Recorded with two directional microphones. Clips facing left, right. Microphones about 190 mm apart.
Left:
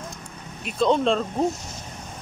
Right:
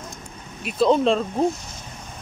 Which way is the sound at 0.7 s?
5° right (ahead or behind).